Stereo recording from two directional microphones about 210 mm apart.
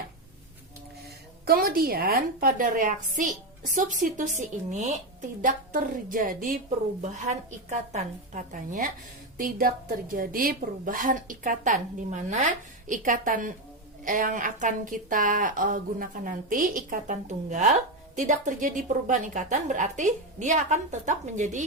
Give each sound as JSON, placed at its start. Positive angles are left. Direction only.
{"t": 1.0, "sound": "a woman's voice", "side_deg": -45}